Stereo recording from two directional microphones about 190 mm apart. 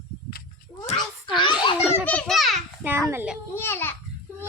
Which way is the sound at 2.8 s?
10° right (ahead or behind).